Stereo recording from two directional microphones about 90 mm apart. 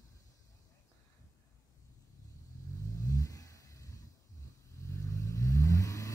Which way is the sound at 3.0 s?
40° left (ahead or behind).